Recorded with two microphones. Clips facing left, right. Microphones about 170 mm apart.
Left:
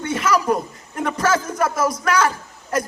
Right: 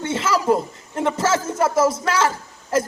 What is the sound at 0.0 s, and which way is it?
A man's voice, 25° right (ahead or behind).